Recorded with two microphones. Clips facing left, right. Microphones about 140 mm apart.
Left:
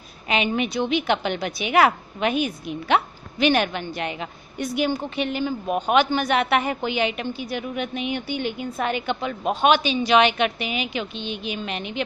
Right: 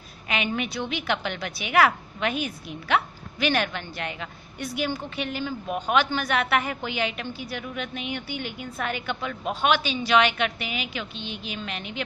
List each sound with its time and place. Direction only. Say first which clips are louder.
0.3 s a woman's voice: left 5 dB; 20° left (ahead or behind)